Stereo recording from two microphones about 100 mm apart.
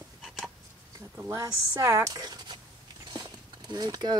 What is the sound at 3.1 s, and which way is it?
Clip-clop, 40° right (ahead or behind).